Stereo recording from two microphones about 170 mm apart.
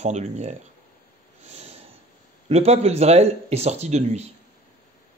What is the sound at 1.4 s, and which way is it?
Snort, 40° right (ahead or behind).